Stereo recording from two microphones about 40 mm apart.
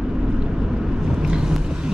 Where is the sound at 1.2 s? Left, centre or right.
Centre.